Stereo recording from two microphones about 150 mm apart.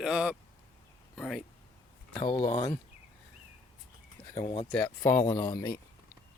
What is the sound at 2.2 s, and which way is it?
Speech, 40° left (ahead or behind).